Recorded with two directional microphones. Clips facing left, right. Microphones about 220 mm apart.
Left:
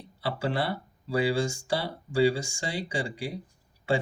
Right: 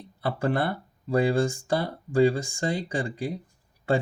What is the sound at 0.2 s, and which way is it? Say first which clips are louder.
Speech: right 3 dB; 50° right (ahead or behind).